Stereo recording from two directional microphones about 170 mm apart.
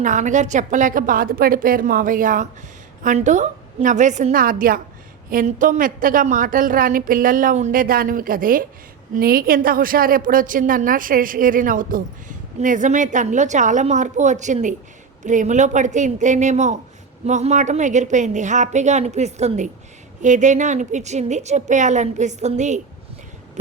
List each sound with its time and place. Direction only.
0.0 s a woman's voice: 45° right (ahead or behind)